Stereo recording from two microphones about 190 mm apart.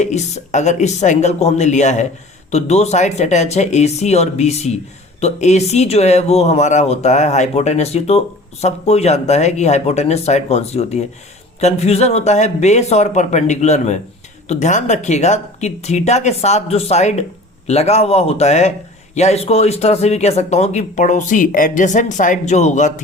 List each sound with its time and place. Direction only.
0.0 s speech: 35° left (ahead or behind)